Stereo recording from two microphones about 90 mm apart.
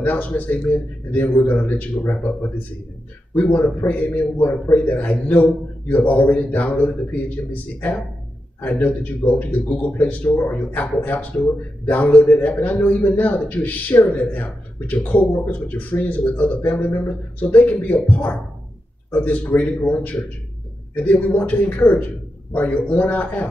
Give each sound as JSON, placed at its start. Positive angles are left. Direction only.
{"t": 0.0, "sound": "a man's voice", "side_deg": 20}